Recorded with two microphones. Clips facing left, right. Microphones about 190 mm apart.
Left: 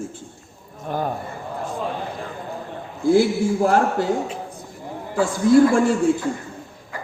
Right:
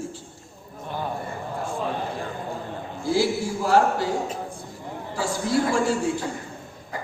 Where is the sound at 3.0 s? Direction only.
55° left (ahead or behind).